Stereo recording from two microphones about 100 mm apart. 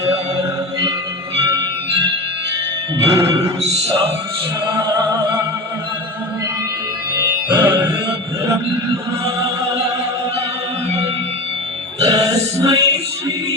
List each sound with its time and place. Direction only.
3.0 s music: 30° right (ahead or behind)
7.5 s music: 15° right (ahead or behind)
12.0 s music: 35° right (ahead or behind)